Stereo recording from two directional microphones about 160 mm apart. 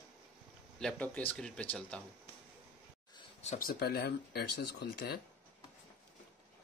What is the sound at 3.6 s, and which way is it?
Speech, 75° left (ahead or behind).